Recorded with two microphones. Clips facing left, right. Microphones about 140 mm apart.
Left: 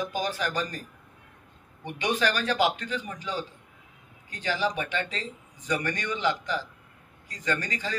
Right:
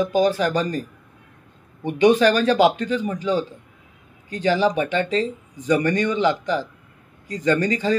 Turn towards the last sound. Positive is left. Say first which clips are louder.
# right 11 dB
turn(degrees=-25)  # may be behind; listen again after turning